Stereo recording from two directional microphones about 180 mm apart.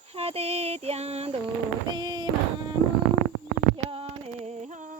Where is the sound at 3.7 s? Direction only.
30° right (ahead or behind).